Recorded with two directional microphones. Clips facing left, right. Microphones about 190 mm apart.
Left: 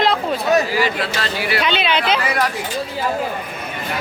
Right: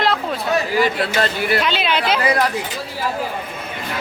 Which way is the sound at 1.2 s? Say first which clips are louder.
Right 5 dB; 50° right (ahead or behind).